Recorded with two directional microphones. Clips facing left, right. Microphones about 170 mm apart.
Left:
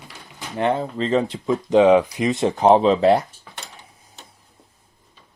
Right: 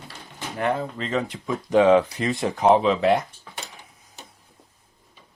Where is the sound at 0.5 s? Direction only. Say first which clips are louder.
Left 4 dB; 25° left (ahead or behind).